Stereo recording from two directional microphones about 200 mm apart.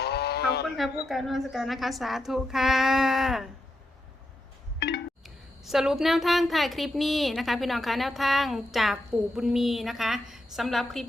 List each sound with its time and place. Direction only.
0.0 s sheep: 55° left (ahead or behind)
1.0 s a woman's voice: centre (ahead or behind)
5.2 s a woman's voice: centre (ahead or behind)